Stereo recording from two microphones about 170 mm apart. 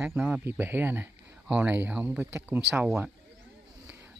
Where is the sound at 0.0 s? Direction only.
10° right (ahead or behind).